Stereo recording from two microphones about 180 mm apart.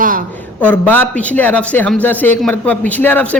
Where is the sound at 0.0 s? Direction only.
50° right (ahead or behind).